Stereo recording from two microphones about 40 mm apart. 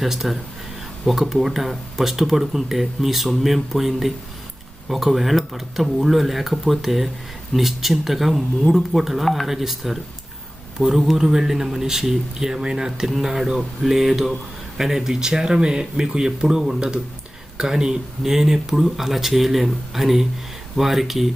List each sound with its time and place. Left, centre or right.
0.0 s speech: centre; by 16.3 s right
16.4 s speech: centre